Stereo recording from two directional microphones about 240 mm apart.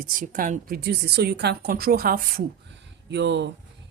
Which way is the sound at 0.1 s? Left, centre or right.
Right.